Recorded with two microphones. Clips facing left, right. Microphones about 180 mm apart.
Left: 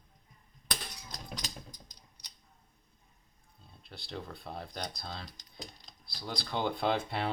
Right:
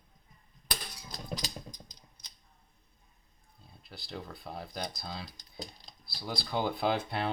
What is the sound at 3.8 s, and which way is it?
Speech, centre (ahead or behind).